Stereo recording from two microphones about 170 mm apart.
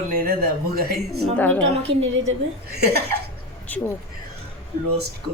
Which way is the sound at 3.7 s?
10° left (ahead or behind).